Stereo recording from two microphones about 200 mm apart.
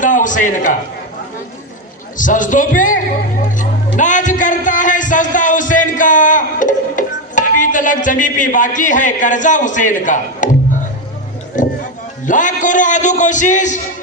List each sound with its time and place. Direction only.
0.0 s a man's voice: 40° left (ahead or behind)
2.1 s a sound: 40° left (ahead or behind)
11.6 s a man's voice: 40° left (ahead or behind)